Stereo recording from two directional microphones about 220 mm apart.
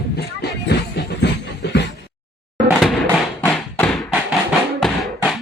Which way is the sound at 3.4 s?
5° left (ahead or behind).